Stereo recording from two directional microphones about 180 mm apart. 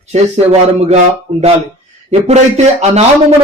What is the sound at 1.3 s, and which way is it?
Speech, 40° right (ahead or behind).